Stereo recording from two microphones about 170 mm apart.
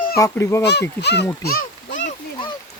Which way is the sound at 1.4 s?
55° left (ahead or behind).